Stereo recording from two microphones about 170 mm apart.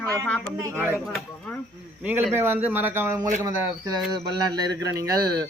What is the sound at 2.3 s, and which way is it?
Speech, 10° right (ahead or behind).